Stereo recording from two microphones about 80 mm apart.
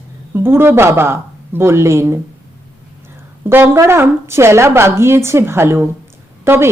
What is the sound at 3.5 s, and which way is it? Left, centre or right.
A woman's voice, right.